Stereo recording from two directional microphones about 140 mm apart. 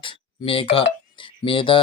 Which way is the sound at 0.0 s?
40° left (ahead or behind).